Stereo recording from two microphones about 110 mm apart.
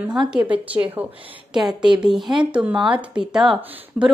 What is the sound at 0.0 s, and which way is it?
A woman's voice, 10° right (ahead or behind).